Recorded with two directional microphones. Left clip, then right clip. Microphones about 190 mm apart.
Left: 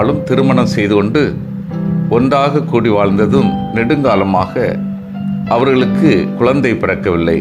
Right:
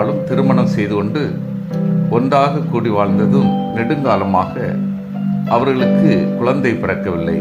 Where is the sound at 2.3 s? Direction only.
20° left (ahead or behind).